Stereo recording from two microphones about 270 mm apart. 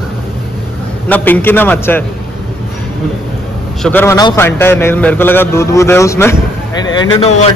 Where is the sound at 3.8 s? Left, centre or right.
Centre.